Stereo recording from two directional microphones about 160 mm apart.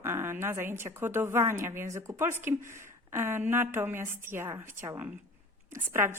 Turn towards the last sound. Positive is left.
turn(degrees=-15)  # may be behind; listen again after turning